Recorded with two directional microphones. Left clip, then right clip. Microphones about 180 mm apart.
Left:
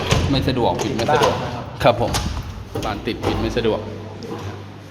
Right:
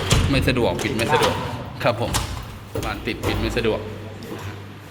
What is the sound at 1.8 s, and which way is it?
Speech, 15° left (ahead or behind).